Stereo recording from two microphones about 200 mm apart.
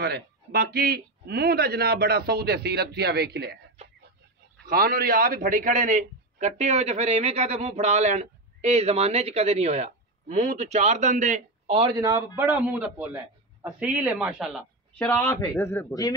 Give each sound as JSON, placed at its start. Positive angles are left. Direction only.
{"t": 0.0, "sound": "speech", "side_deg": -55}
{"t": 3.8, "sound": "a sound", "side_deg": -30}
{"t": 4.6, "sound": "a man's voice", "side_deg": -45}
{"t": 12.4, "sound": "a man's voice", "side_deg": -10}
{"t": 15.1, "sound": "a man's voice", "side_deg": 10}